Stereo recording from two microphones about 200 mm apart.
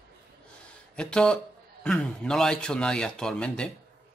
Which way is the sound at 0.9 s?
5° left (ahead or behind).